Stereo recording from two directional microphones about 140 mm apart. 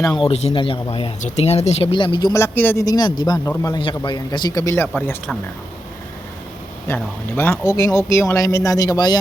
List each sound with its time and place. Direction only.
0.0 s speech: 30° left (ahead or behind)
0.3 s speech: 50° left (ahead or behind)
0.5 s a man's voice: 35° left (ahead or behind)
1.2 s speech: 50° left (ahead or behind)
1.9 s a man's voice: 35° left (ahead or behind)
2.3 s speech: 15° left (ahead or behind)
2.8 s a man's voice: 25° left (ahead or behind)
4.7 s speech: 15° left (ahead or behind)
6.8 s speech: 15° left (ahead or behind)
7.7 s speech: 25° left (ahead or behind)